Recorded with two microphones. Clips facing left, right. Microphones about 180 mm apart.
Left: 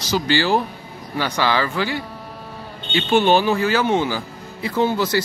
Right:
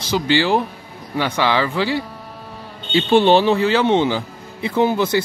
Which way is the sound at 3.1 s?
30° right (ahead or behind).